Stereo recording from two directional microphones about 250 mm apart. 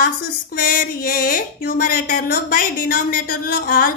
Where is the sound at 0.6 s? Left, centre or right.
Left.